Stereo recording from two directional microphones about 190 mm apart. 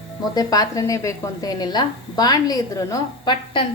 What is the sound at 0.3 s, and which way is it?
A woman's voice, 20° left (ahead or behind).